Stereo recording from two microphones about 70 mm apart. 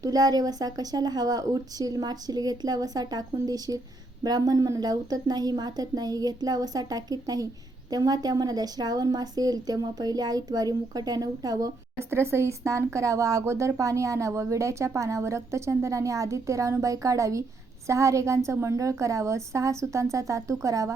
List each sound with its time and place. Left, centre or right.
0.0 s a woman's voice: right
11.9 s speech: right